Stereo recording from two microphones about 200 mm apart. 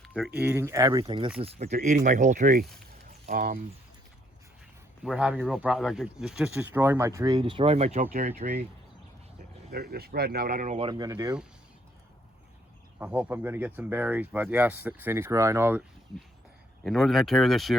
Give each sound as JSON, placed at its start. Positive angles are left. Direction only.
{"t": 0.0, "sound": "speech", "side_deg": 0}
{"t": 5.0, "sound": "speech", "side_deg": -5}
{"t": 9.7, "sound": "speech", "side_deg": -50}
{"t": 10.8, "sound": "speech", "side_deg": -20}
{"t": 13.0, "sound": "speech", "side_deg": -5}
{"t": 16.8, "sound": "speech", "side_deg": 0}